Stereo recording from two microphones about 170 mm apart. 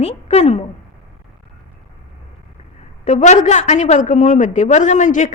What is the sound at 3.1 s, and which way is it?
A woman's voice, 45° left (ahead or behind).